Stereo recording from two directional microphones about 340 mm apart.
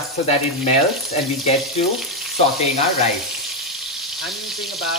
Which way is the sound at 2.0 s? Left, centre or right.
Centre.